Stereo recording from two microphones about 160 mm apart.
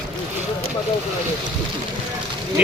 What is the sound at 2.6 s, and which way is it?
Speech, 10° right (ahead or behind).